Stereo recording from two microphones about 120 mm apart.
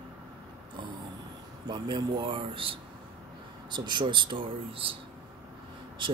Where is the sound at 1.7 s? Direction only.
40° right (ahead or behind).